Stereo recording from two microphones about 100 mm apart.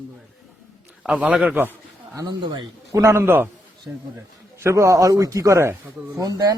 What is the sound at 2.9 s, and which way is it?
Speech, 30° right (ahead or behind).